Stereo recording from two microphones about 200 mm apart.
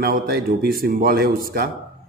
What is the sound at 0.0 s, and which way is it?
A man's voice, 50° right (ahead or behind).